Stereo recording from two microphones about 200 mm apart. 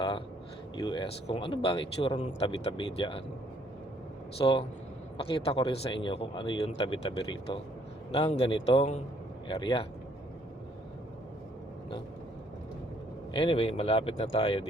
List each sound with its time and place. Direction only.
0.8 s speech: 25° left (ahead or behind)
4.4 s speech: 25° left (ahead or behind)
13.3 s speech: 25° left (ahead or behind)